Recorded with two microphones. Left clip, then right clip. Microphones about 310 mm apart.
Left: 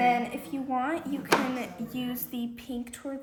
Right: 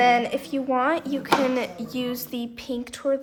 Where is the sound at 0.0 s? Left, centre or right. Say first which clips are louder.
Right 6 dB; centre.